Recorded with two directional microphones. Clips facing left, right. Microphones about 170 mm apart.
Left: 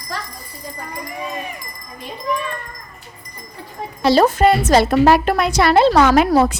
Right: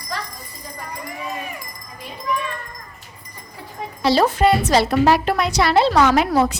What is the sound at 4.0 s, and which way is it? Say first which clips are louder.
A woman's voice: left 3 dB; 50° left (ahead or behind).